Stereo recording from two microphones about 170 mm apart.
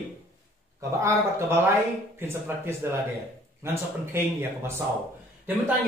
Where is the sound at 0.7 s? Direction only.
15° right (ahead or behind).